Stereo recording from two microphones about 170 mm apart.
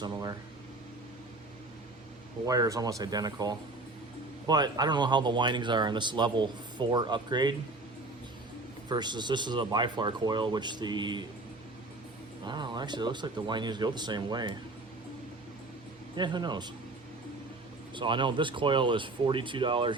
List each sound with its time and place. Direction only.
0.0 s speech: 20° right (ahead or behind)
2.5 s speech: 20° right (ahead or behind)
8.9 s speech: 25° right (ahead or behind)
12.5 s speech: 25° right (ahead or behind)
16.1 s speech: 25° right (ahead or behind)
17.9 s speech: 30° right (ahead or behind)